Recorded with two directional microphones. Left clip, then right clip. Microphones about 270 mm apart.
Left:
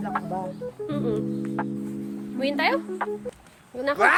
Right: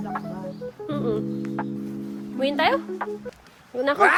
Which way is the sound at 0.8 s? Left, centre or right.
Centre.